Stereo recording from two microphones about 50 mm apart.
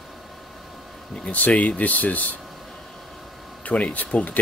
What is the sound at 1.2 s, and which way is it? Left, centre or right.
Speech, left.